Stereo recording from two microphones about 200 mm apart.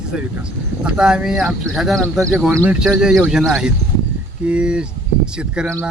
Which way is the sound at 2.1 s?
15° right (ahead or behind).